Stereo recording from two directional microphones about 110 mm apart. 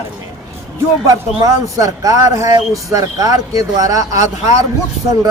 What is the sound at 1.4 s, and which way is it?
Speech, 35° right (ahead or behind).